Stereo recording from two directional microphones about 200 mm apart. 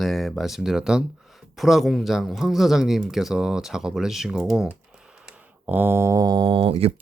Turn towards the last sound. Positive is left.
turn(degrees=-30)  # may be behind; listen again after turning